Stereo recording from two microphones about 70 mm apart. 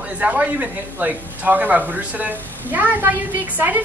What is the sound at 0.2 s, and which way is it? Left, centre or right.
Speech, centre.